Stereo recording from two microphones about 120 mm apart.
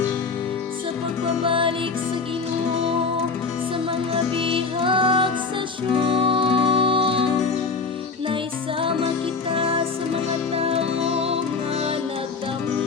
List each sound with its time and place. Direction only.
1.5 s music: 45° right (ahead or behind)
4.1 s music: 45° right (ahead or behind)
9.6 s music: 50° right (ahead or behind)